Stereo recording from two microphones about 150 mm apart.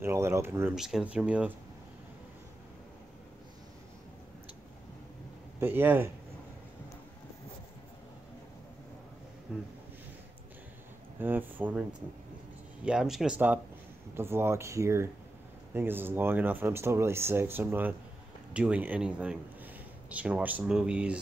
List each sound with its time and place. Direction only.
0.0 s speech: 20° right (ahead or behind)
0.7 s speech: 5° right (ahead or behind)
5.6 s speech: 15° right (ahead or behind)
9.5 s speech: 5° right (ahead or behind)
11.1 s speech: 10° right (ahead or behind)
12.8 s speech: 5° right (ahead or behind)